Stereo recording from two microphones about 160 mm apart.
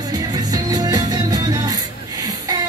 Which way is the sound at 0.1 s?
25° right (ahead or behind).